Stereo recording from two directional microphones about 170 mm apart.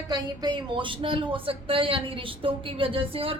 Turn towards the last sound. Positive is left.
turn(degrees=-35)  # may be behind; listen again after turning